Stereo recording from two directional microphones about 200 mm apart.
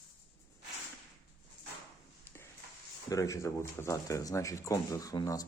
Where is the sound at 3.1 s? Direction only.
15° left (ahead or behind).